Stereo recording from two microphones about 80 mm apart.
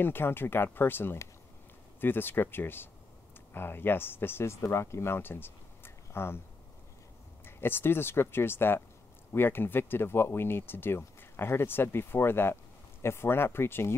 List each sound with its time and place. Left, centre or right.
0.0 s speech: left
7.4 s speech: left